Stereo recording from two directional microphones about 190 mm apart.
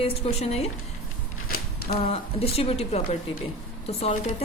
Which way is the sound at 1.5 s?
55° left (ahead or behind).